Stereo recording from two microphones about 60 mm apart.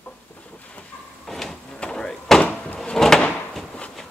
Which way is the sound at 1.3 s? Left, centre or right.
Centre.